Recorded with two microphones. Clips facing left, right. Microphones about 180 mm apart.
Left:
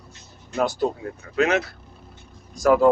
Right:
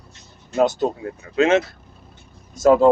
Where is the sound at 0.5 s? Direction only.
20° right (ahead or behind).